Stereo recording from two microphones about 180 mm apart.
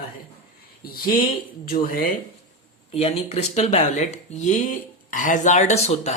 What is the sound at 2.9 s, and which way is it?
A man's voice, 35° left (ahead or behind).